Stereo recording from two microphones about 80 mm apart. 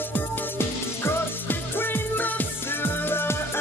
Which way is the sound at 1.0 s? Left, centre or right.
Left.